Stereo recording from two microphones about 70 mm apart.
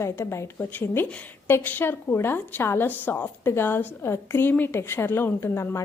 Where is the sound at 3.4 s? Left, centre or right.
Left.